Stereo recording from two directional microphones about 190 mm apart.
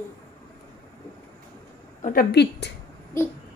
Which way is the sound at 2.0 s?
50° left (ahead or behind).